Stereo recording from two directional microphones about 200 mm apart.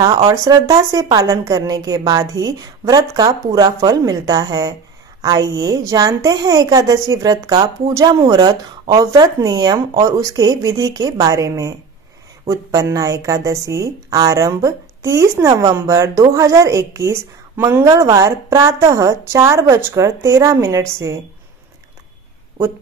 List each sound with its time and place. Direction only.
0.3 s a woman's voice: 15° right (ahead or behind)